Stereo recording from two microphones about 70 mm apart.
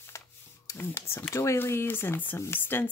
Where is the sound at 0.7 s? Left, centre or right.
Left.